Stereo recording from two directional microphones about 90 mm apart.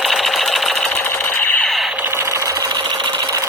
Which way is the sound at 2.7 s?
55° right (ahead or behind).